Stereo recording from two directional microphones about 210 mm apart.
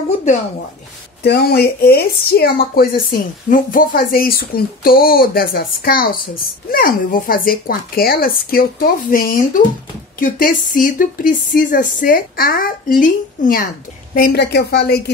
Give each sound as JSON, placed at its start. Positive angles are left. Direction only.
{"t": 1.2, "sound": "speech", "side_deg": 50}